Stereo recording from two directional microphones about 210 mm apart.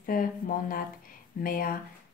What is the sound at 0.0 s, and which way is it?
Speech, 40° left (ahead or behind).